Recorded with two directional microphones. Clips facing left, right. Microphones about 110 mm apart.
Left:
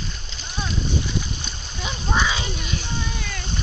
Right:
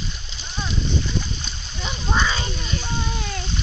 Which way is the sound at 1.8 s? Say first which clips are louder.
Even; 5° left (ahead or behind).